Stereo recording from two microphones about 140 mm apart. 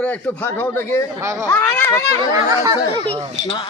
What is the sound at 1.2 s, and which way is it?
Speech, 20° right (ahead or behind).